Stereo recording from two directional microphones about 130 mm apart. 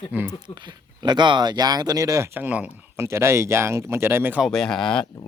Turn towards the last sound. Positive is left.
turn(degrees=5)  # may be behind; listen again after turning